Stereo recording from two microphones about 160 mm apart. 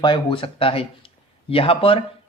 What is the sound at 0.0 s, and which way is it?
Speech, 30° left (ahead or behind).